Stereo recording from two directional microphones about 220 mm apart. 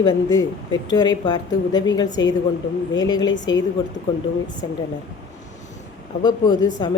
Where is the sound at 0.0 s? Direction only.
15° left (ahead or behind).